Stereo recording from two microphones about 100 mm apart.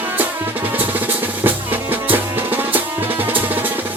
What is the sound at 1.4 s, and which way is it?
Music, 20° right (ahead or behind).